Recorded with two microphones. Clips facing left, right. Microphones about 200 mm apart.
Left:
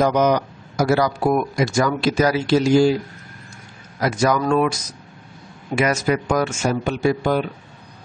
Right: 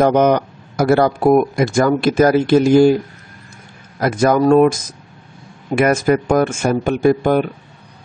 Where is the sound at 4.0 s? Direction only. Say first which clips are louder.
Right 5 dB; 50° right (ahead or behind).